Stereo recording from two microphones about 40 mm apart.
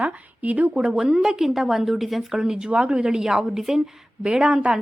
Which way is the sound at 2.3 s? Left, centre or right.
Centre.